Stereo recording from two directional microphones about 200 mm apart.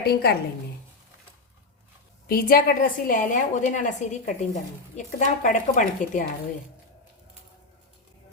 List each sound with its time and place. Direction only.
0.0 s a woman's voice: 50° left (ahead or behind)
2.2 s a woman's voice: 45° left (ahead or behind)